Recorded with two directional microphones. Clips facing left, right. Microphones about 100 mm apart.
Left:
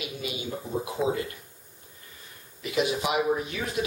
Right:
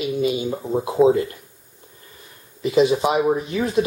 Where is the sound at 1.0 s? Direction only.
5° right (ahead or behind).